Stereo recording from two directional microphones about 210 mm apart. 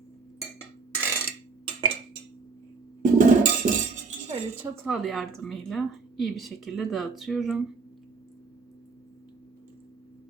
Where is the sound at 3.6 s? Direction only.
40° right (ahead or behind).